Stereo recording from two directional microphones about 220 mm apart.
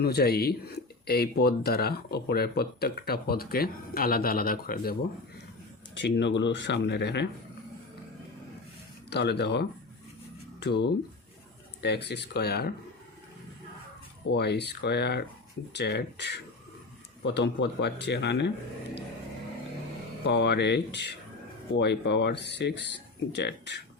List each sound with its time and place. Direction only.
0.0 s speech: 45° left (ahead or behind)
6.0 s speech: 55° left (ahead or behind)
9.0 s speech: 50° left (ahead or behind)
14.3 s speech: 50° left (ahead or behind)
20.2 s speech: 50° left (ahead or behind)